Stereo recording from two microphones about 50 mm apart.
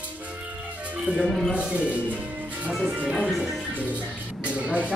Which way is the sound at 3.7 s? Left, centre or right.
Right.